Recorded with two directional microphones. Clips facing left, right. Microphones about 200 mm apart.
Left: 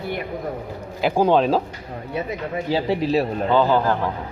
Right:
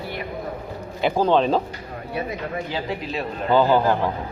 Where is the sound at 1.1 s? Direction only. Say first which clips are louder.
Left 2 dB; 10° left (ahead or behind).